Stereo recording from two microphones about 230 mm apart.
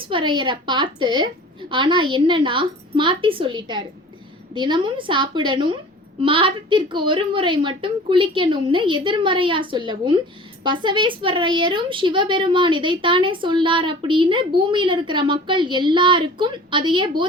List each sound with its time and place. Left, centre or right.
0.0 s a woman's voice: right